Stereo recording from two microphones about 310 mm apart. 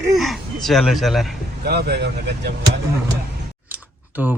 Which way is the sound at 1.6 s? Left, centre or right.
Right.